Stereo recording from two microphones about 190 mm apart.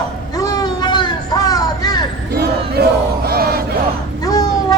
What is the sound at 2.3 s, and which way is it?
Battle cry, 55° right (ahead or behind).